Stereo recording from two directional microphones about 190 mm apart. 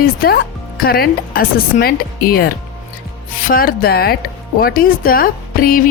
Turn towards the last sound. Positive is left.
turn(degrees=45)  # may be behind; listen again after turning